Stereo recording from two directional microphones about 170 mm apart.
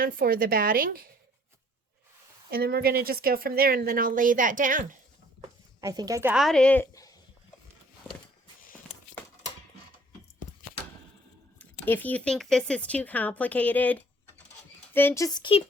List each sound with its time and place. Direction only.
0.0 s a woman's voice: 60° right (ahead or behind)
2.5 s a woman's voice: 65° right (ahead or behind); by 4.9 s 50° right (ahead or behind)
5.8 s a woman's voice: 20° right (ahead or behind)
6.3 s a woman's voice: centre (ahead or behind)
6.9 s a sound: 20° left (ahead or behind)
11.9 s speech: 10° left (ahead or behind); by 15.6 s 30° left (ahead or behind)